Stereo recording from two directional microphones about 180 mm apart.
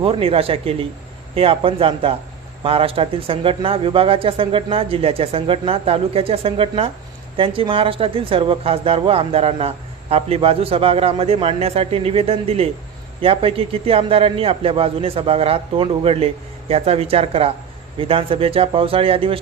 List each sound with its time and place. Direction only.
0.0 s speech: 30° right (ahead or behind)